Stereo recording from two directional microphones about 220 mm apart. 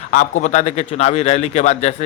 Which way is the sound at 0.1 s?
35° left (ahead or behind).